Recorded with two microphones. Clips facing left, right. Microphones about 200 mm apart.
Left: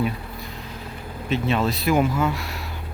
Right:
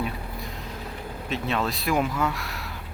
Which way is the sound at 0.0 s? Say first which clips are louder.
Left 5 dB; centre (ahead or behind).